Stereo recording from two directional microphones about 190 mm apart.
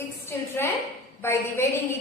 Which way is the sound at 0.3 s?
10° left (ahead or behind).